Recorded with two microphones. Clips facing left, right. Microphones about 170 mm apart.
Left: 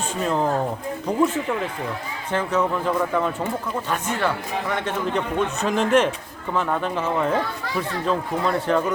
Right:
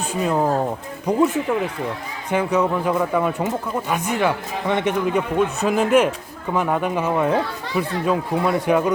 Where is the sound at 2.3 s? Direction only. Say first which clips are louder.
Right 3 dB; 10° right (ahead or behind).